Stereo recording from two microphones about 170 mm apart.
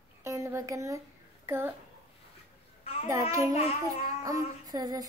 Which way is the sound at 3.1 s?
15° right (ahead or behind).